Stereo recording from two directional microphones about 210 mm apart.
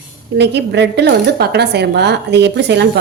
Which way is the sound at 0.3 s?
55° right (ahead or behind).